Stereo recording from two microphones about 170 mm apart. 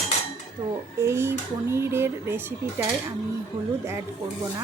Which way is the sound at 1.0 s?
15° right (ahead or behind).